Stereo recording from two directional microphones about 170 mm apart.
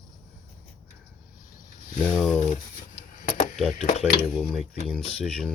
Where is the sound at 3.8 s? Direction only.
40° left (ahead or behind).